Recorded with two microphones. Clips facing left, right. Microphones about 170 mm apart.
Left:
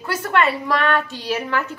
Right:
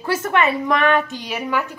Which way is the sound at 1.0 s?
15° right (ahead or behind).